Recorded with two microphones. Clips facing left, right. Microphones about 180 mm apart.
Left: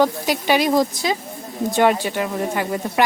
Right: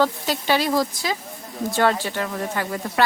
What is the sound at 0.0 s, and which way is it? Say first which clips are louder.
Speech: left 3 dB; 15° left (ahead or behind).